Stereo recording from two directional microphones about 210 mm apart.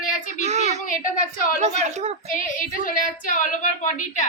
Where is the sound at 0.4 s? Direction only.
30° right (ahead or behind).